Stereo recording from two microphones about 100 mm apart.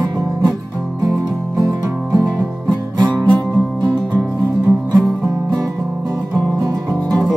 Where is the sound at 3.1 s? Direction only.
10° left (ahead or behind).